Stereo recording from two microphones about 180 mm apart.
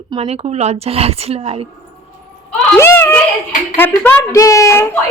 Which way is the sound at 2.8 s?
15° left (ahead or behind).